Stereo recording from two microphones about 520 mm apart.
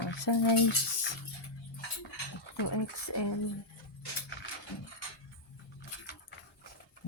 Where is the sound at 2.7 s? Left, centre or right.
Left.